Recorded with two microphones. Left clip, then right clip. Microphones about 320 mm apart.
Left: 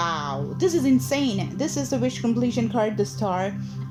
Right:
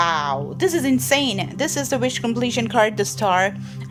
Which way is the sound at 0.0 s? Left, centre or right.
Right.